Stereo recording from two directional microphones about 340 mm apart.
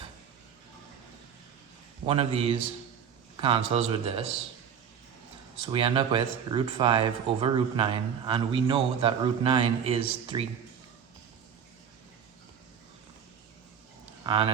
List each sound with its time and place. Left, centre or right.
2.0 s speech: centre
5.6 s speech: centre
14.3 s speech: centre